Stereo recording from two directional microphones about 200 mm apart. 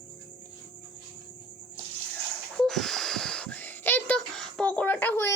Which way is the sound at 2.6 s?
Centre (ahead or behind).